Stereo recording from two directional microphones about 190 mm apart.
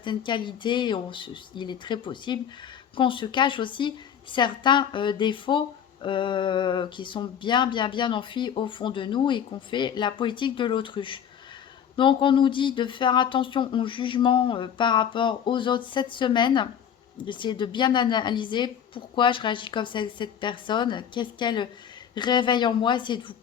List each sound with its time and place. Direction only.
0.0 s a woman's voice: 25° left (ahead or behind)